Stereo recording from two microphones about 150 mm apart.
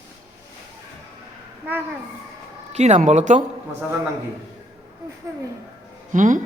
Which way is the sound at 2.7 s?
50° right (ahead or behind).